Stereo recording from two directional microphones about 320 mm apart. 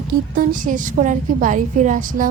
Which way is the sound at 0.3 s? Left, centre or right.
Right.